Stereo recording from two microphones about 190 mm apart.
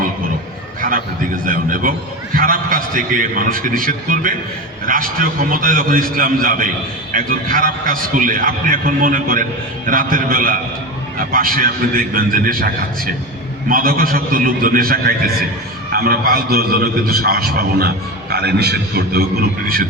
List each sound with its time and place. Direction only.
0.8 s a man's voice: 45° right (ahead or behind)